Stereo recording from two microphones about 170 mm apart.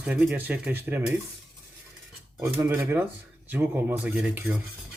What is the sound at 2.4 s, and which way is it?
Speech, 15° right (ahead or behind).